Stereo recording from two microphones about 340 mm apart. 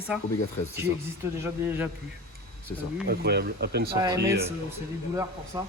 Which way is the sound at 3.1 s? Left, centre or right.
Right.